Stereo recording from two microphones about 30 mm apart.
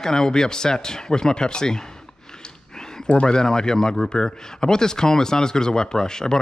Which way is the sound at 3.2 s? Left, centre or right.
Left.